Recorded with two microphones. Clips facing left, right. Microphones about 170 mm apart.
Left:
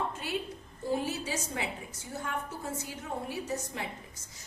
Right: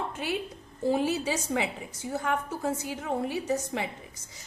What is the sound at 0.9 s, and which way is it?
A woman's voice, 90° right.